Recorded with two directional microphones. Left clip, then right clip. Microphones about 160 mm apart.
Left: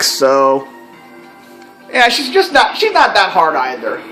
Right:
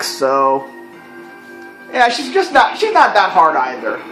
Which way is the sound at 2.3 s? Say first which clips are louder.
Even; 15° left (ahead or behind).